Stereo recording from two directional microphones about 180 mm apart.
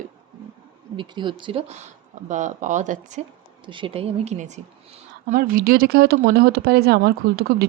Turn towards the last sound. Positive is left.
turn(degrees=-60)  # may be behind; listen again after turning